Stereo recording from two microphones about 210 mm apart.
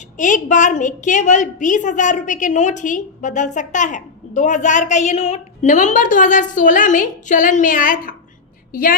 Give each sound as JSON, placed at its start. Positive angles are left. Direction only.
{"t": 0.2, "sound": "a woman's voice", "side_deg": 35}